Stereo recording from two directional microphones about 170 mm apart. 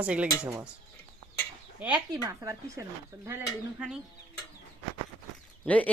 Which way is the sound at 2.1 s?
20° right (ahead or behind).